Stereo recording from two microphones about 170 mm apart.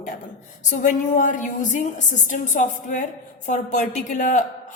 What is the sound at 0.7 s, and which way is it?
A woman's voice, 50° left (ahead or behind).